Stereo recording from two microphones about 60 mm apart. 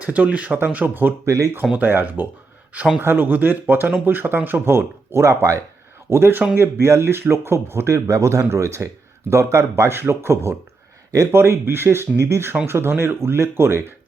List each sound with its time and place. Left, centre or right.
0.0 s speech: right
1.2 s speech: right
1.7 s speech: right
4.6 s speech: right
6.1 s speech: right